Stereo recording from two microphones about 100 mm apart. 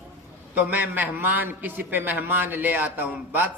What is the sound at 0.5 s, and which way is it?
A man's voice, 15° right (ahead or behind).